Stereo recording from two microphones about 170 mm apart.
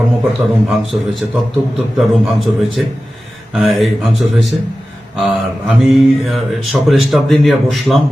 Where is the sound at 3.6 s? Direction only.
Centre (ahead or behind).